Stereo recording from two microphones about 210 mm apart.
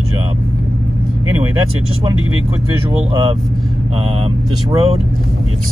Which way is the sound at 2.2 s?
75° right (ahead or behind).